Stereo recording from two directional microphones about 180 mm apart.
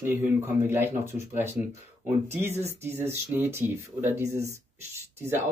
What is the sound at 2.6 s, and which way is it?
Speech, 15° right (ahead or behind).